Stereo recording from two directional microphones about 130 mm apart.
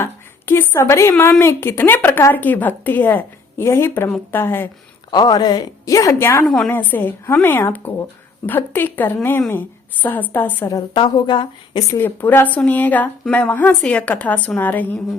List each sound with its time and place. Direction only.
0.0 s a woman's voice: 20° left (ahead or behind)
5.1 s a woman's voice: 30° left (ahead or behind)
6.4 s a woman's voice: centre (ahead or behind)
6.7 s a woman's voice: 15° left (ahead or behind)
10.7 s a woman's voice: 35° left (ahead or behind)
11.9 s a woman's voice: 15° left (ahead or behind)